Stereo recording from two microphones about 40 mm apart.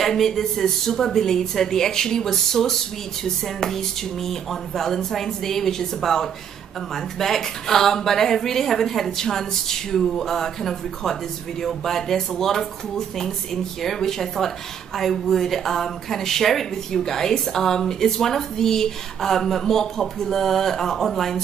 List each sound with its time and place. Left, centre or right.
0.0 s speech: centre